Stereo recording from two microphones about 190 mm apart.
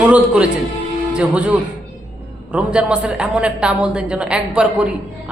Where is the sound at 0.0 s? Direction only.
5° right (ahead or behind).